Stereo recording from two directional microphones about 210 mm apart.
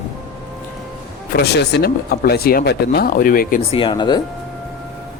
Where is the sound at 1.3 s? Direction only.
50° left (ahead or behind).